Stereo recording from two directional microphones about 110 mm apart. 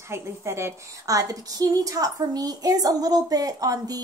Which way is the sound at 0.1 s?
25° right (ahead or behind).